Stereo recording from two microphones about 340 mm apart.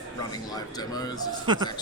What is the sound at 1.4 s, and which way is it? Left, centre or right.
Speech, centre.